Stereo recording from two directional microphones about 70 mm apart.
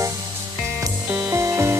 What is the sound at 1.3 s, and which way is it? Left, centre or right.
Music, right.